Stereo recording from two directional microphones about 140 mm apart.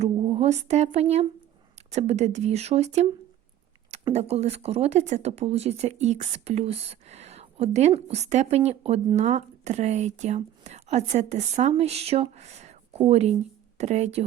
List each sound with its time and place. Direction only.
0.3 s speech: 45° right (ahead or behind)
4.1 s speech: 50° right (ahead or behind)